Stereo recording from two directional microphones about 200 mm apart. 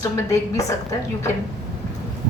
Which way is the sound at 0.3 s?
15° left (ahead or behind).